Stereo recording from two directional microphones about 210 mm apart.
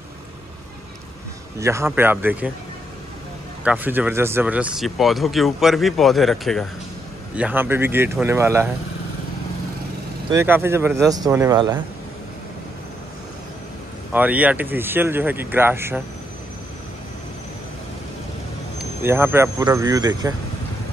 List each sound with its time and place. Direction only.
1.6 s speech: 15° right (ahead or behind)
3.6 s speech: 10° right (ahead or behind)
10.3 s speech: 10° right (ahead or behind)
14.1 s speech: 5° right (ahead or behind)
19.0 s speech: 10° right (ahead or behind)